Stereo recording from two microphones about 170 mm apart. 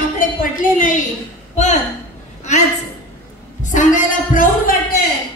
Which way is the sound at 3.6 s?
50° left (ahead or behind).